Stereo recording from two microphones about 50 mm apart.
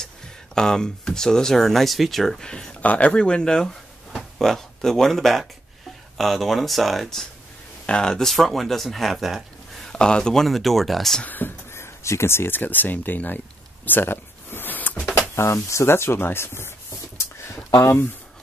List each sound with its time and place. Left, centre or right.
0.6 s speech: centre
2.4 s speech: centre
2.8 s speech: left; by 7.2 s centre
7.8 s speech: centre
9.9 s speech: centre
11.2 s speech: left
11.7 s speech: left
13.8 s a sound: left
15.1 s speech: left
15.9 s speech: left